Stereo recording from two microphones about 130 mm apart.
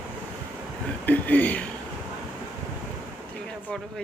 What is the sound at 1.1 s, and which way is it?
Speech, 10° left (ahead or behind).